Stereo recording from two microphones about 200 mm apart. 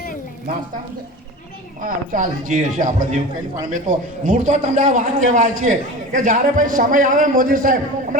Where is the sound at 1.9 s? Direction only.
40° right (ahead or behind).